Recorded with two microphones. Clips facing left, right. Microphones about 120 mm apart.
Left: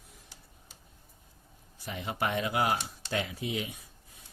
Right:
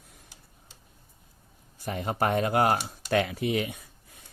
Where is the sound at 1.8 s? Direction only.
45° right (ahead or behind).